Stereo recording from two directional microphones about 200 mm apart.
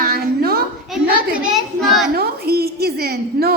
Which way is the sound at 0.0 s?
50° right (ahead or behind).